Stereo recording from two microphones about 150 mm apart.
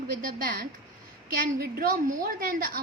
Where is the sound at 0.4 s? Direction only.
75° right (ahead or behind).